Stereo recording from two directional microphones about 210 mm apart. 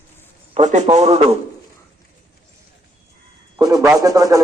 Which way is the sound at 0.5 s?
35° right (ahead or behind).